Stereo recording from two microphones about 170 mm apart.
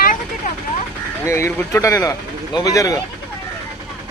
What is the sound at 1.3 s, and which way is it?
Speech, 15° left (ahead or behind).